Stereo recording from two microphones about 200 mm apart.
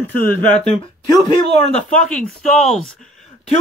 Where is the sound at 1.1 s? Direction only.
25° left (ahead or behind).